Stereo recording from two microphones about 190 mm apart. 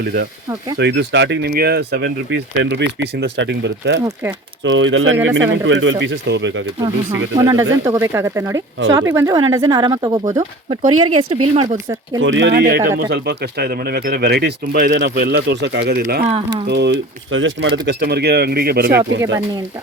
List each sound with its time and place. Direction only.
0.0 s speech: 60° right (ahead or behind)
4.0 s speech: 10° right (ahead or behind)
4.6 s speech: 80° right
6.7 s speech: 20° right (ahead or behind)
12.2 s speech: 75° right (ahead or behind)
17.8 s speech: 60° right (ahead or behind)
19.2 s speech: 15° right (ahead or behind)